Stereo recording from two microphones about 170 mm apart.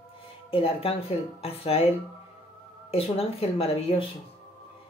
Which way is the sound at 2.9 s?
35° left (ahead or behind).